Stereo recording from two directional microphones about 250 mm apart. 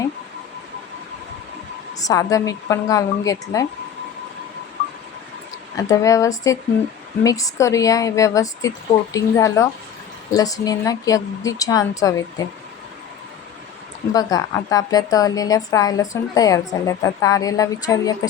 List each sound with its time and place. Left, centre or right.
2.0 s a woman's voice: centre
5.7 s a woman's voice: centre
14.1 s a woman's voice: centre